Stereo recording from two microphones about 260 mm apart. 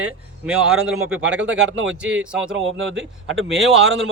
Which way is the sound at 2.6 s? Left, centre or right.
Right.